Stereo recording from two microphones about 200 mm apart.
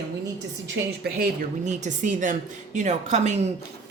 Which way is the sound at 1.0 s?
50° right (ahead or behind).